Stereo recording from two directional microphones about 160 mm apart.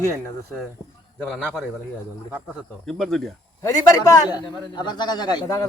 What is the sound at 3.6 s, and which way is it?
A man's voice, 20° left (ahead or behind).